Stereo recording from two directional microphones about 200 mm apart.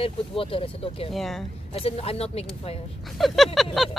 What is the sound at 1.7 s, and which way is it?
Speech, 30° left (ahead or behind).